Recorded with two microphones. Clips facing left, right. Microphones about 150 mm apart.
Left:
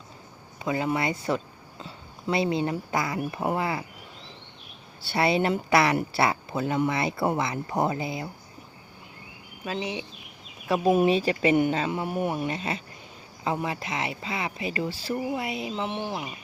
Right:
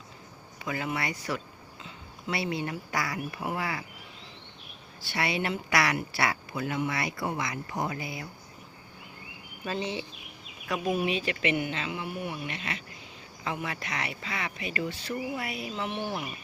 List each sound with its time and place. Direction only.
0.6 s speech: 25° left (ahead or behind)
3.2 s speech: 40° left (ahead or behind)
3.6 s speech: 25° left (ahead or behind)
5.1 s speech: 30° left (ahead or behind)
9.6 s speech: 15° left (ahead or behind)
10.9 s speech: 40° left (ahead or behind)
13.4 s speech: 35° left (ahead or behind)